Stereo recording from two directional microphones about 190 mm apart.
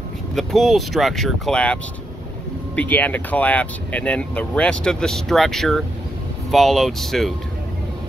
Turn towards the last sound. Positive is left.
turn(degrees=0)  # may be behind; listen again after turning